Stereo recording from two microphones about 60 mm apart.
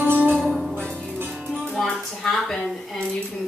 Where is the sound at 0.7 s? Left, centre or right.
Left.